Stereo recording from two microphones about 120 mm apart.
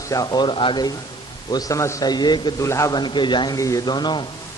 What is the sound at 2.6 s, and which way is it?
Speech, 25° left (ahead or behind).